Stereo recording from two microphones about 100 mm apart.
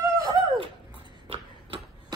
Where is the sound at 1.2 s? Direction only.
80° right.